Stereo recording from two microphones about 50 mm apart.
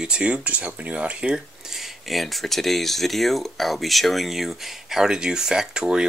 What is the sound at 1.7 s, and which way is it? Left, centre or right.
Speech, centre.